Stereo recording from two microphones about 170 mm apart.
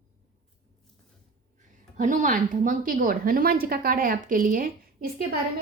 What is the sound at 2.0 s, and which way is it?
A woman's voice, 50° right (ahead or behind).